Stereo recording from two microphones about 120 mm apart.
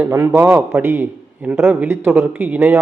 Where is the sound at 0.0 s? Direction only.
20° right (ahead or behind).